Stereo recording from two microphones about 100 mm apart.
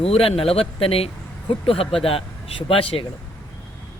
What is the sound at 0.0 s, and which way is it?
Speech, 75° left (ahead or behind).